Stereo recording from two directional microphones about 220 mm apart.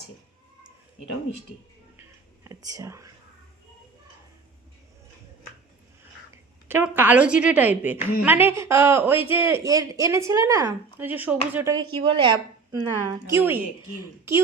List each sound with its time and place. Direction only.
2.0 s whispering: 10° right (ahead or behind)
6.3 s a woman's voice: 10° right (ahead or behind)
11.9 s a woman's voice: 25° right (ahead or behind)